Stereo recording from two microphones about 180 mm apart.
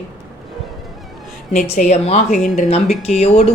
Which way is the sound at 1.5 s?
40° left (ahead or behind).